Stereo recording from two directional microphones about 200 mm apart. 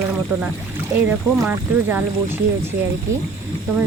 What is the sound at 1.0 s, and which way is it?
Speech, 10° right (ahead or behind).